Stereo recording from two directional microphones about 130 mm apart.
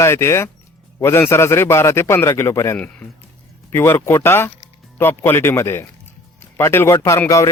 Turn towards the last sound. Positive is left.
turn(degrees=25)  # may be behind; listen again after turning